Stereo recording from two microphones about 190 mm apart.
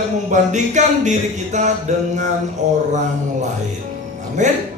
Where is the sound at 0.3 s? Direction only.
40° right (ahead or behind).